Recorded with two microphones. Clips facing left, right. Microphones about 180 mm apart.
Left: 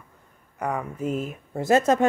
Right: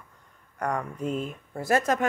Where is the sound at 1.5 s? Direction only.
20° left (ahead or behind).